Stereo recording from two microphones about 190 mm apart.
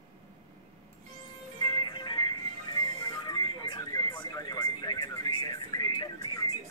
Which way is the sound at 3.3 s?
20° left (ahead or behind).